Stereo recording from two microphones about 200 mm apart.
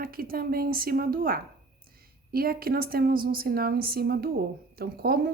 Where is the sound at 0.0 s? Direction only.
45° right (ahead or behind).